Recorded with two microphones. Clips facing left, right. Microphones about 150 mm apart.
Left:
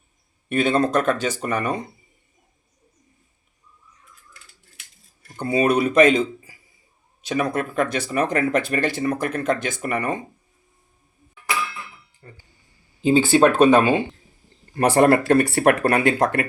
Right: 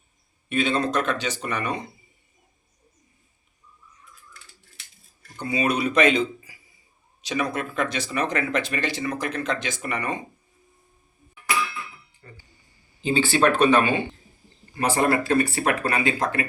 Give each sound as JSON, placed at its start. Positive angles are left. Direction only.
{"t": 0.4, "sound": "speech", "side_deg": 50}
{"t": 5.4, "sound": "speech", "side_deg": 50}
{"t": 12.2, "sound": "music", "side_deg": 30}
{"t": 13.1, "sound": "speech", "side_deg": 45}
{"t": 14.8, "sound": "speech", "side_deg": 65}